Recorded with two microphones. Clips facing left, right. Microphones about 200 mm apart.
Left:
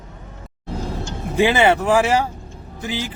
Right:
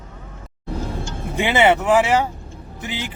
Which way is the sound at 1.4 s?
20° right (ahead or behind).